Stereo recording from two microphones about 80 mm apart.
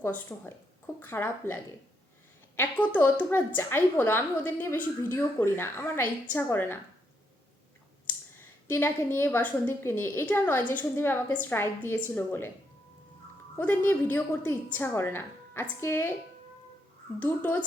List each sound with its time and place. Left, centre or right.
0.3 s speech: centre
0.9 s a woman's voice: left
2.6 s a woman's voice: centre
8.4 s a woman's voice: left
13.6 s a woman's voice: left
17.2 s a woman's voice: left